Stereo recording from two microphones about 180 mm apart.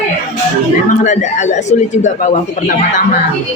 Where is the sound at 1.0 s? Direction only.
40° left (ahead or behind).